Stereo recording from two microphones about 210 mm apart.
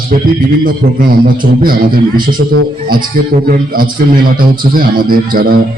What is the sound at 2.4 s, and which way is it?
Speech, 60° right (ahead or behind).